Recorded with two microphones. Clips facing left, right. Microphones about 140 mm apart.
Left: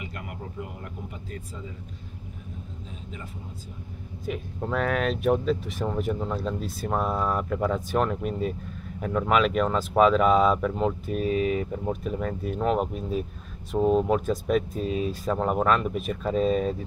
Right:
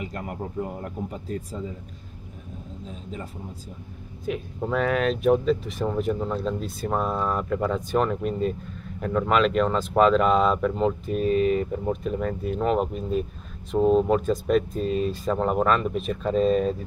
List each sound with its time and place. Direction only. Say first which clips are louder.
0.0 s speech: right 6 dB; 40° right (ahead or behind)
4.3 s speech: right 3 dB; centre (ahead or behind)